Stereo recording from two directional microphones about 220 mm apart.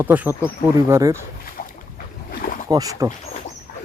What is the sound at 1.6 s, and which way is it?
Boat, 40° left (ahead or behind).